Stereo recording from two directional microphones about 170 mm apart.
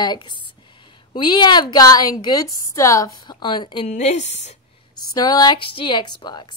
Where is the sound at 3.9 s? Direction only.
40° left (ahead or behind).